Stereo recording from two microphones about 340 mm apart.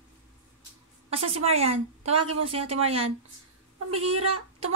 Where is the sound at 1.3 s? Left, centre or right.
Centre.